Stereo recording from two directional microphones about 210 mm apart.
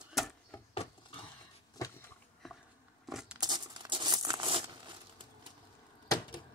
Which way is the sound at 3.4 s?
20° right (ahead or behind).